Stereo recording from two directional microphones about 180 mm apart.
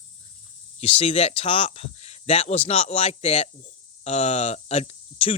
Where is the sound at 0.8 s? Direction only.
35° left (ahead or behind).